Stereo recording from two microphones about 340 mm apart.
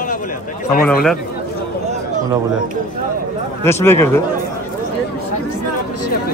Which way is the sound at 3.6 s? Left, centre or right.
Centre.